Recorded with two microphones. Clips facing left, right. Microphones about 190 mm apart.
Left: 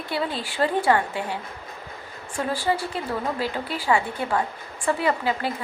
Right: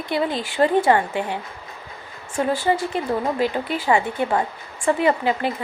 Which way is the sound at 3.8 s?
25° right (ahead or behind).